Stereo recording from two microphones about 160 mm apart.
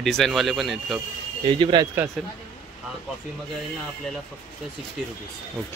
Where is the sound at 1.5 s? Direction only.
30° right (ahead or behind).